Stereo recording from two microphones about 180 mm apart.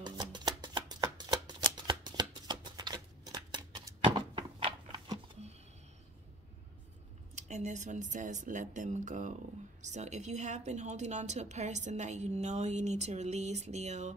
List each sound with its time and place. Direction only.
0.0 s shuffling cards: 25° right (ahead or behind)
7.3 s a woman's voice: 40° right (ahead or behind)